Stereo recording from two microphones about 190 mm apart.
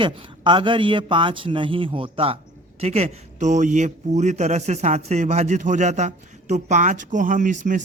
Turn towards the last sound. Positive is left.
turn(degrees=-40)  # may be behind; listen again after turning